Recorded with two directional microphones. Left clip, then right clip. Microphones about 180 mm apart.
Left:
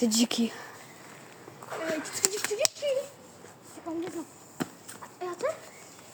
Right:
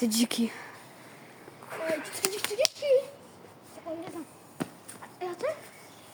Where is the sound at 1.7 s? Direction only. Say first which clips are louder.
Right 1 dB; 5° left (ahead or behind).